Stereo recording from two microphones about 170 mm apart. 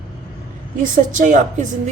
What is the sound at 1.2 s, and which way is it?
Speech, 45° right (ahead or behind).